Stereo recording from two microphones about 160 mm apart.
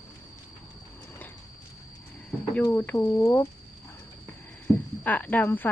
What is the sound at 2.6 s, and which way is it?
Speech, 10° left (ahead or behind).